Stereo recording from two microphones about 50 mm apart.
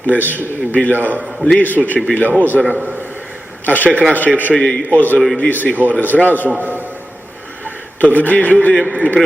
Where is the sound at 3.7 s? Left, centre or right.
Left.